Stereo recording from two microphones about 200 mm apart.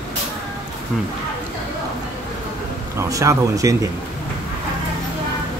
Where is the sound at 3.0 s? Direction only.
15° right (ahead or behind).